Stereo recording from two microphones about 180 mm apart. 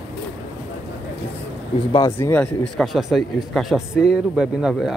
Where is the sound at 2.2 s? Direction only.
10° left (ahead or behind).